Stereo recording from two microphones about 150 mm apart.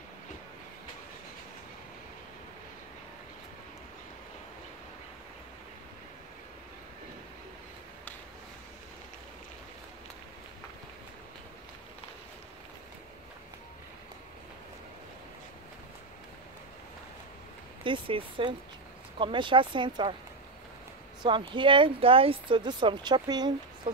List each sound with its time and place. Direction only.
17.8 s speech: 35° right (ahead or behind)
21.2 s speech: 30° right (ahead or behind)